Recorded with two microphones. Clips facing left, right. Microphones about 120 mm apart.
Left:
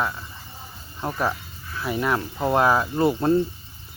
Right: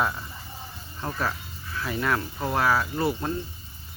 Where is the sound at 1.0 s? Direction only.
15° left (ahead or behind).